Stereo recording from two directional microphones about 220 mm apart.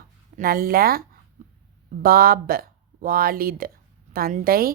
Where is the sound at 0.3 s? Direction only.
40° right (ahead or behind).